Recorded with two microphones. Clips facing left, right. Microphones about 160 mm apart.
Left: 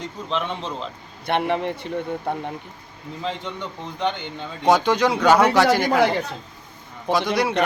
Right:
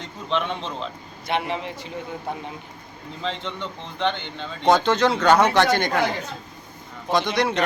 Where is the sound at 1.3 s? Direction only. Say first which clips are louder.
Left 4 dB; 55° left (ahead or behind).